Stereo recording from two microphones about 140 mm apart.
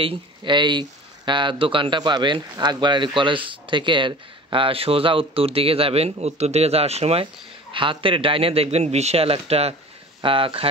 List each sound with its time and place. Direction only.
0.0 s speech: 35° right (ahead or behind)
7.7 s a man's voice: 35° right (ahead or behind)